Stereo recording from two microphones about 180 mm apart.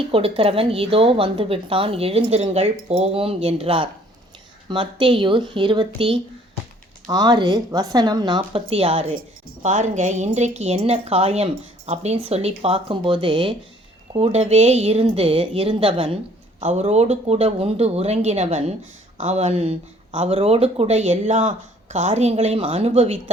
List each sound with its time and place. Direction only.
0.1 s a woman's voice: 30° right (ahead or behind)